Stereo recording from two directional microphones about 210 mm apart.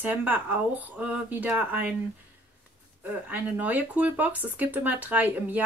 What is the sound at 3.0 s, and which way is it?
Speech, 5° right (ahead or behind).